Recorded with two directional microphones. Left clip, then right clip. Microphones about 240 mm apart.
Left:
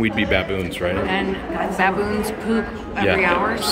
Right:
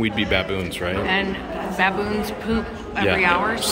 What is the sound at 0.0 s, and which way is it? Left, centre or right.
Speech, centre.